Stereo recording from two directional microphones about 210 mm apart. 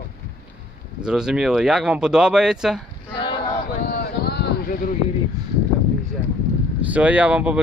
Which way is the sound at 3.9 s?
50° left (ahead or behind).